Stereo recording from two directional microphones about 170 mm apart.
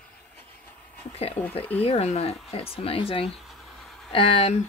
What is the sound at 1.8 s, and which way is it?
Speech, 35° left (ahead or behind).